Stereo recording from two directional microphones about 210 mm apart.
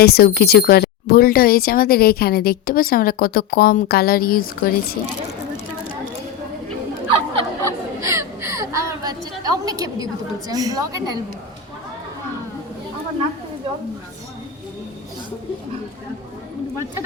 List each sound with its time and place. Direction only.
0.0 s speech: 50° left (ahead or behind)
7.6 s chatter: 15° right (ahead or behind)
10.5 s a woman's voice: 15° right (ahead or behind)